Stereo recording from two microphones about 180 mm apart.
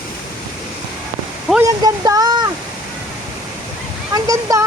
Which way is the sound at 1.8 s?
20° right (ahead or behind).